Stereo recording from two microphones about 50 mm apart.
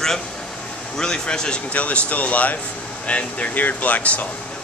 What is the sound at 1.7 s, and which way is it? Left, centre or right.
Speech, left.